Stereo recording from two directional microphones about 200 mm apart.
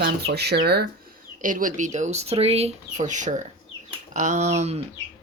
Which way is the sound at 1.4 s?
40° right (ahead or behind).